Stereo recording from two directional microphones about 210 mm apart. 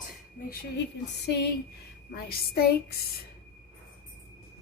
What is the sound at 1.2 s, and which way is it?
A woman's voice, 50° left (ahead or behind).